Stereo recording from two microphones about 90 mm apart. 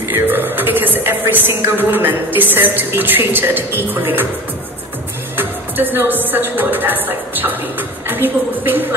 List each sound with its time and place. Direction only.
0.1 s a man's voice: 20° right (ahead or behind)
5.3 s a man's voice: 20° right (ahead or behind)